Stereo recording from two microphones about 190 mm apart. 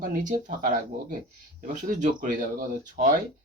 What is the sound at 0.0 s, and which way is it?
Speech, 45° right (ahead or behind).